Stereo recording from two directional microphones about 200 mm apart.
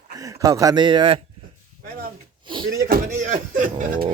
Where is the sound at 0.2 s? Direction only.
15° right (ahead or behind).